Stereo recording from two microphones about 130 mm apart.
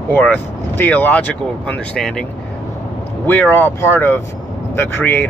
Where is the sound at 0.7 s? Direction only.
15° left (ahead or behind).